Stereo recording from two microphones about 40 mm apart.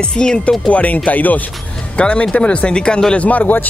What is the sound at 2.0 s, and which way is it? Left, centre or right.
Speech, left.